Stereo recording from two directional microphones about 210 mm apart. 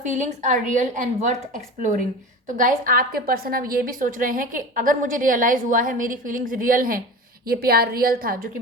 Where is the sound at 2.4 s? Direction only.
40° right (ahead or behind).